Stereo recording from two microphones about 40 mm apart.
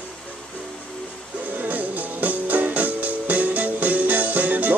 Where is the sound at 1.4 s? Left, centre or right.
Right.